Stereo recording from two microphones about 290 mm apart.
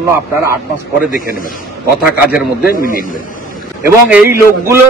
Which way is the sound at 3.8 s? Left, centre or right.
Centre.